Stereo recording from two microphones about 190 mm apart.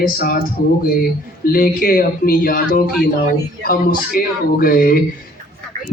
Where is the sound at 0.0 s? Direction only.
50° left (ahead or behind).